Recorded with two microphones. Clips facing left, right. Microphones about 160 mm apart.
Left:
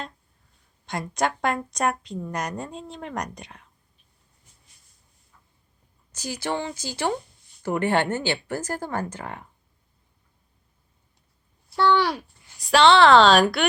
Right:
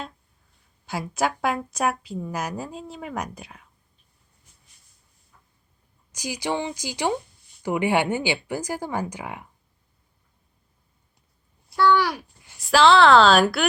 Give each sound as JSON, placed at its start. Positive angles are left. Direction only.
{"t": 0.9, "sound": "a woman's voice", "side_deg": -5}
{"t": 6.1, "sound": "speech", "side_deg": -15}
{"t": 11.8, "sound": "speech", "side_deg": 25}
{"t": 12.5, "sound": "a woman's voice", "side_deg": 0}